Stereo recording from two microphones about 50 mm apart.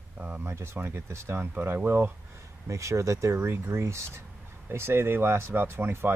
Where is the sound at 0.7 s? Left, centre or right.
Right.